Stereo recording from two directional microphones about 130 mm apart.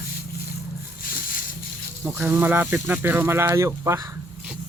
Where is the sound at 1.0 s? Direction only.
90° left.